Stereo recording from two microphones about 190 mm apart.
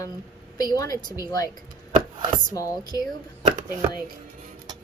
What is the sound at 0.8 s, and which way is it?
Speech, 20° left (ahead or behind).